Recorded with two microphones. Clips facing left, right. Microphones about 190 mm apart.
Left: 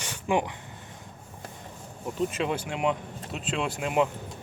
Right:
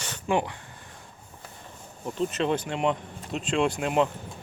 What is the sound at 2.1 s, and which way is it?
Speech, 10° left (ahead or behind).